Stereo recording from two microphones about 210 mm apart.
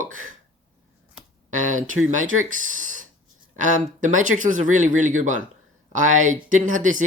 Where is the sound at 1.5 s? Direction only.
35° right (ahead or behind).